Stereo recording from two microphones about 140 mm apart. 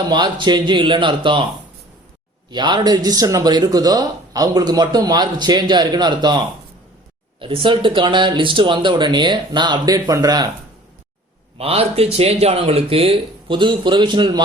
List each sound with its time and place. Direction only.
0.1 s speech: 35° right (ahead or behind)
2.5 s speech: 30° right (ahead or behind)
11.5 s speech: 45° right (ahead or behind)